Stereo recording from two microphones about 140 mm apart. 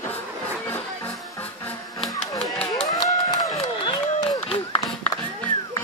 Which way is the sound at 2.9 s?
25° left (ahead or behind).